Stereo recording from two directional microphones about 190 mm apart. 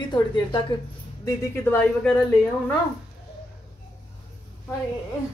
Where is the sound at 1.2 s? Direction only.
10° left (ahead or behind).